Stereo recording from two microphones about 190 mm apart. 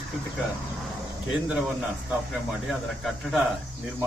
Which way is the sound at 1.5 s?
5° right (ahead or behind).